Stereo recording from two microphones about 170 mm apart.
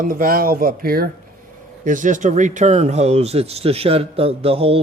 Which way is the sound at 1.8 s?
50° right (ahead or behind).